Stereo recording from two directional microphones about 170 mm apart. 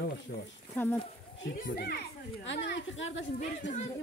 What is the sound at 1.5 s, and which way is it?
A child's voice, 60° left (ahead or behind).